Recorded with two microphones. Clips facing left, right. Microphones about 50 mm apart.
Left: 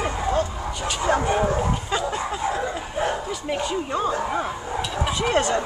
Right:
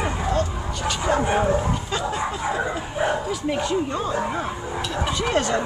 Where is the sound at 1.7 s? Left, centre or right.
Centre.